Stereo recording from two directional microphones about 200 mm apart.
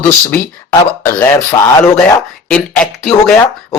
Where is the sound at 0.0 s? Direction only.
10° left (ahead or behind).